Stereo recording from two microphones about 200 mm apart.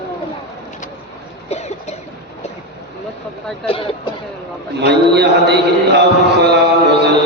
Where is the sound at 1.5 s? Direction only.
35° left (ahead or behind).